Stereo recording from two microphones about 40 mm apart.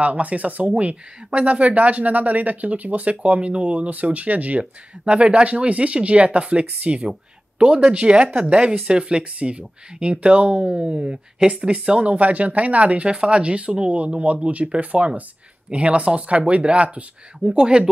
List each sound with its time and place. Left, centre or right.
0.0 s speech: right
7.1 s a sound: right
7.8 s speech: right
12.1 s speech: right
17.5 s speech: centre